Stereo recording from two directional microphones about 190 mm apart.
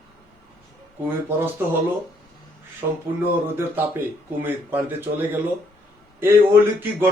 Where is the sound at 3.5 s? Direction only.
10° right (ahead or behind).